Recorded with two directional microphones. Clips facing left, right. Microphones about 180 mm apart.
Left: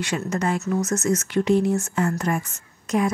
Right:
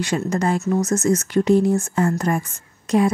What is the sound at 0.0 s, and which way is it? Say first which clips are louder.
Speech: right 4 dB; 35° right (ahead or behind).